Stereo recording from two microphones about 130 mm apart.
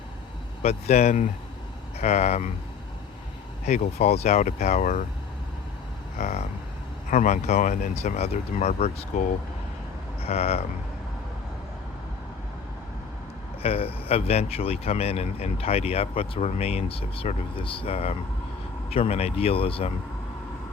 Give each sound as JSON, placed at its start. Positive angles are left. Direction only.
{"t": 0.6, "sound": "speech", "side_deg": 55}
{"t": 3.7, "sound": "speech", "side_deg": 55}
{"t": 6.1, "sound": "speech", "side_deg": 60}
{"t": 7.1, "sound": "speech", "side_deg": 70}
{"t": 10.2, "sound": "speech", "side_deg": 55}
{"t": 13.6, "sound": "speech", "side_deg": 50}